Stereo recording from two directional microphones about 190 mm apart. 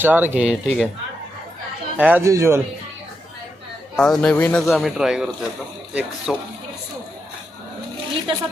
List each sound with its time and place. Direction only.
0.0 s speech: 10° right (ahead or behind)
2.0 s speech: 10° right (ahead or behind)
3.9 s speech: 5° left (ahead or behind)
4.7 s speech: centre (ahead or behind)